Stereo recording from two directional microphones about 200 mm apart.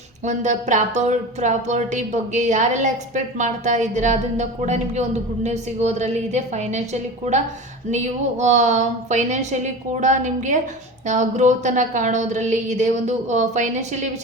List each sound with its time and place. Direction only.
0.3 s speech: 35° right (ahead or behind)